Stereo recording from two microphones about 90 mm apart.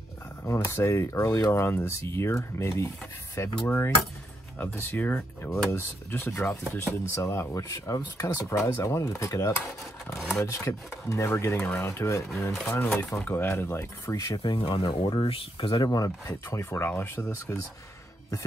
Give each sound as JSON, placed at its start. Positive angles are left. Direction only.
{"t": 0.5, "sound": "speech", "side_deg": 30}
{"t": 14.4, "sound": "speech", "side_deg": 60}
{"t": 15.8, "sound": "speech", "side_deg": 45}